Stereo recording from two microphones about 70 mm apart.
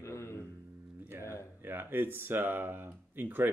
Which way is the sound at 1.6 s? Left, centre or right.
Right.